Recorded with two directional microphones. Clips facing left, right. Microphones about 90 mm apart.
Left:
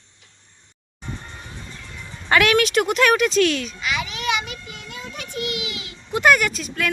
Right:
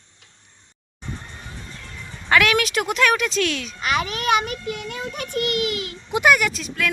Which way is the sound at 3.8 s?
45° right (ahead or behind).